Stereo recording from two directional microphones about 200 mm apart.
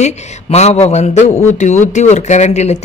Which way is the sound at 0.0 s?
30° left (ahead or behind).